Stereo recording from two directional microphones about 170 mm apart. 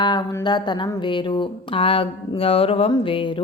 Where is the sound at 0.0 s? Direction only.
25° left (ahead or behind).